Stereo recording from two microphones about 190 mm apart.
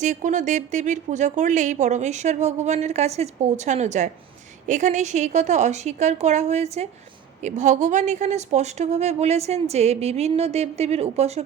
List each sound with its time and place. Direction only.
0.0 s speech: 40° right (ahead or behind)